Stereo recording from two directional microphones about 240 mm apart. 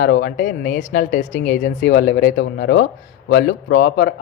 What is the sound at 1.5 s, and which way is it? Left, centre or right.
Speech, left.